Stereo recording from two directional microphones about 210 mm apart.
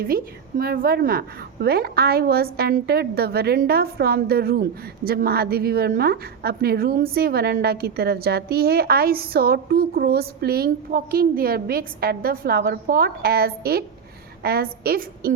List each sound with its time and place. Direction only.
0.0 s a woman's voice: 45° right (ahead or behind)